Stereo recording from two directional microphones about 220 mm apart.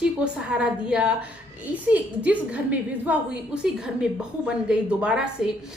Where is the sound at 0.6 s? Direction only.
5° right (ahead or behind).